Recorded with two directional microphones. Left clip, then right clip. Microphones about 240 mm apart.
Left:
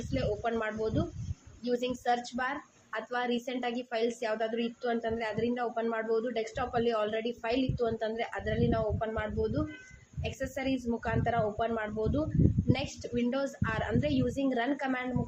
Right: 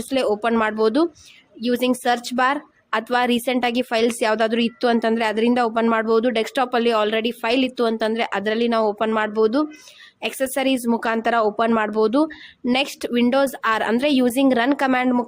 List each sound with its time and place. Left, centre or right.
0.1 s speech: right